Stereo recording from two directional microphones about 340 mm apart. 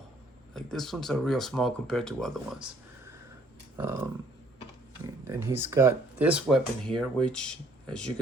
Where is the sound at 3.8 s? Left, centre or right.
Centre.